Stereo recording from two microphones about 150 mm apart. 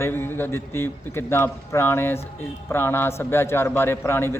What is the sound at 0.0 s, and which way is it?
A man's voice, 15° left (ahead or behind).